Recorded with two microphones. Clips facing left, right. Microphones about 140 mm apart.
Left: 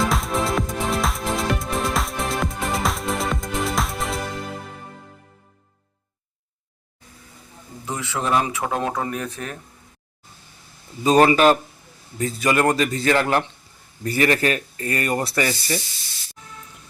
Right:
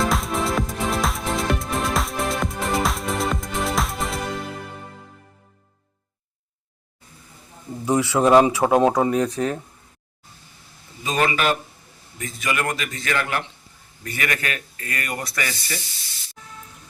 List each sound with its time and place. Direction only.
0.0 s music: centre (ahead or behind)
7.9 s a man's voice: 15° right (ahead or behind)
8.3 s speech: 30° right (ahead or behind)
11.0 s speech: 35° left (ahead or behind)